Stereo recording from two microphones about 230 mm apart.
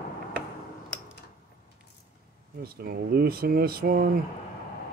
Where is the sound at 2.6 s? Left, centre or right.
Right.